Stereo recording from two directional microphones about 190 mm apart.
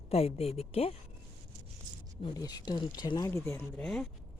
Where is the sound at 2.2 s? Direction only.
20° left (ahead or behind); by 4.1 s 5° left (ahead or behind).